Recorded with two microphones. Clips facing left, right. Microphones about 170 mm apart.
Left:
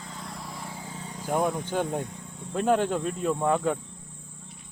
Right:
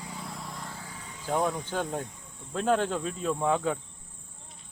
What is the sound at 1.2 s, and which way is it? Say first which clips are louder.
Speech: left 2 dB; 15° left (ahead or behind).